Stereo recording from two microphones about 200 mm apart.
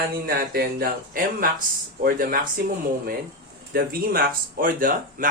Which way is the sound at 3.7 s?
50° right (ahead or behind).